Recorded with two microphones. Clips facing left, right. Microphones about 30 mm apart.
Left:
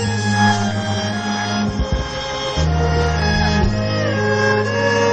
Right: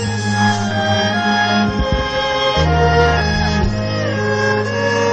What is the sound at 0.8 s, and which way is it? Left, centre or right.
Music, right.